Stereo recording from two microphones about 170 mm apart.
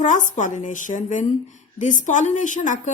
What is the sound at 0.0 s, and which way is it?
A woman's voice, 45° left (ahead or behind).